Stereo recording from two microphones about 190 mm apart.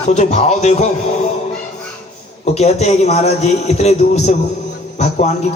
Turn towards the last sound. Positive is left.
turn(degrees=35)  # may be behind; listen again after turning